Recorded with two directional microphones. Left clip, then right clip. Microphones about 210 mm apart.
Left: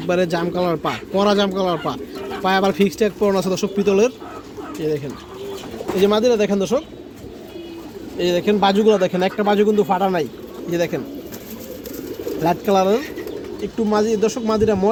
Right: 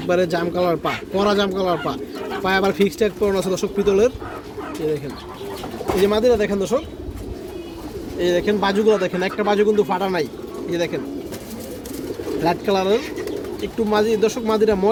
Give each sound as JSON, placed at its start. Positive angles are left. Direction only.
{"t": 0.1, "sound": "speech", "side_deg": 35}
{"t": 6.0, "sound": "speech", "side_deg": 45}
{"t": 8.2, "sound": "speech", "side_deg": 40}
{"t": 12.4, "sound": "speech", "side_deg": 45}